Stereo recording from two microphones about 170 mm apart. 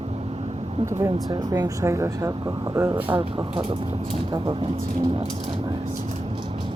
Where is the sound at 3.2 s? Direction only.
30° right (ahead or behind).